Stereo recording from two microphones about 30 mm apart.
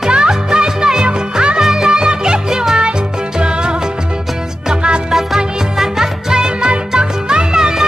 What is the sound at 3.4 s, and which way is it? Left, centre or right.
Music, right.